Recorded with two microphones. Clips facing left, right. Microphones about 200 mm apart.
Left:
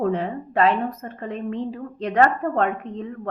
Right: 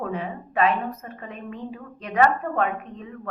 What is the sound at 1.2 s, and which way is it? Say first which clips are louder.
A woman's voice: left 8 dB; 30° left (ahead or behind).